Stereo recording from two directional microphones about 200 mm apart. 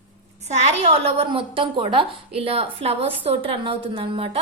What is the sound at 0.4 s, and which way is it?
A woman's voice, 35° right (ahead or behind).